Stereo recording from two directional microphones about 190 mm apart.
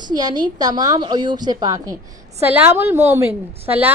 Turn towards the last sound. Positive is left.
turn(degrees=-10)  # may be behind; listen again after turning